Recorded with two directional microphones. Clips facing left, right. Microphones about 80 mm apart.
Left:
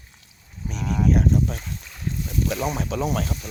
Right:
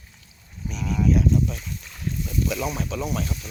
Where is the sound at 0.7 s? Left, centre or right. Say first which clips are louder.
Left 1 dB; left.